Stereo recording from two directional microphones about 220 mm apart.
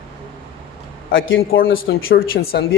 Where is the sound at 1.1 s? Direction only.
60° left (ahead or behind).